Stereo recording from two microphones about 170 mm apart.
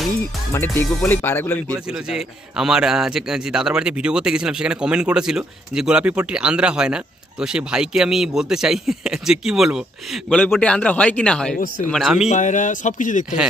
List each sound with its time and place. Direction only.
0.5 s speech: 15° left (ahead or behind)
2.0 s a man's voice: 5° right (ahead or behind)
12.3 s speech: 45° left (ahead or behind)